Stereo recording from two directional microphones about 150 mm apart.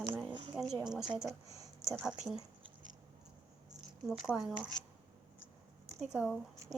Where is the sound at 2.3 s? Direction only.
30° right (ahead or behind).